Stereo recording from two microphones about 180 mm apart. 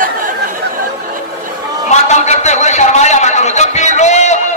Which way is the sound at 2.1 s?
40° left (ahead or behind).